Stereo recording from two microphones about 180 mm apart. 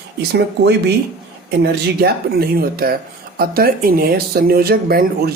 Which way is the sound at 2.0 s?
60° right (ahead or behind).